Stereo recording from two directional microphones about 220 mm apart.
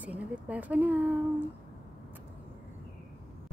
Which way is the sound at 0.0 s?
5° right (ahead or behind).